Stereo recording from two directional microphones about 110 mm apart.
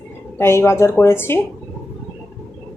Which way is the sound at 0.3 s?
20° left (ahead or behind).